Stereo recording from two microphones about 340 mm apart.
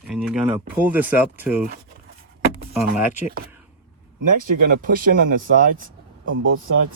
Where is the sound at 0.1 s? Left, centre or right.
Centre.